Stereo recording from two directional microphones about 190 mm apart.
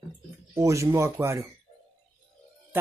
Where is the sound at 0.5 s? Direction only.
15° right (ahead or behind).